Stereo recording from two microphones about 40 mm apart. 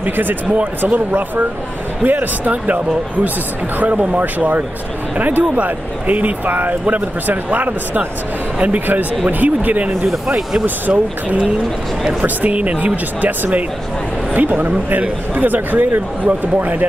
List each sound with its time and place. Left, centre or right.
0.0 s speech: right
0.5 s speech: right
8.5 s speech: right
9.3 s speech: right
10.9 s speech: right